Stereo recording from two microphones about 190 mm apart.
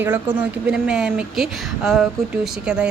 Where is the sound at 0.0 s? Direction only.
10° right (ahead or behind).